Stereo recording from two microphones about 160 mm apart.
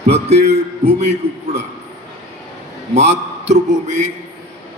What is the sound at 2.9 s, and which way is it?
Speech, 45° right (ahead or behind).